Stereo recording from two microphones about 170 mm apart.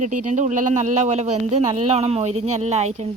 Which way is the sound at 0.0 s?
45° right (ahead or behind).